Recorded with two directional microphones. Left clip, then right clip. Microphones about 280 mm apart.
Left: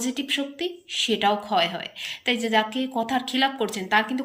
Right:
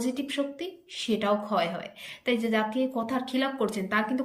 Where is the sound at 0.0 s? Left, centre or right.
Centre.